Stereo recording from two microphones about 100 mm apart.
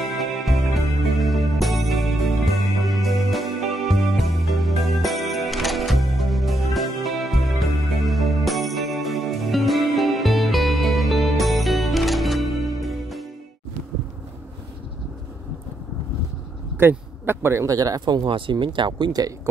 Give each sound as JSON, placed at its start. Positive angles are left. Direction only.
{"t": 0.0, "sound": "music", "side_deg": 0}
{"t": 16.7, "sound": "speech", "side_deg": -20}